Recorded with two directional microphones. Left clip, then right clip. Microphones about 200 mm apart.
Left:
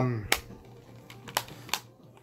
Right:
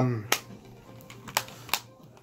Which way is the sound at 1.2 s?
Centre (ahead or behind).